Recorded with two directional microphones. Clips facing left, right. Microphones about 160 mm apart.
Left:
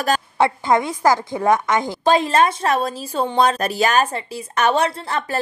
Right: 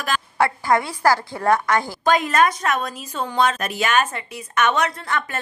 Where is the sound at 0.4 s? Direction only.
20° left (ahead or behind).